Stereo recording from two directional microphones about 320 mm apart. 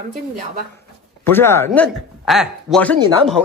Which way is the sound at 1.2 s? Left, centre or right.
Centre.